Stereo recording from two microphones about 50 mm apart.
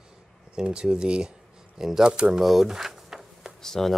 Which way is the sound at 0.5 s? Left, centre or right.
Centre.